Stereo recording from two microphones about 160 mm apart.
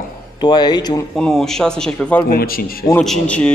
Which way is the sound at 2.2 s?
70° left (ahead or behind).